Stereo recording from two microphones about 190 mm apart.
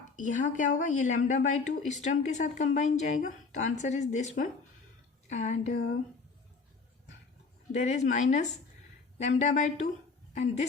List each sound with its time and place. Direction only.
0.2 s speech: 40° left (ahead or behind)
7.7 s speech: 35° left (ahead or behind)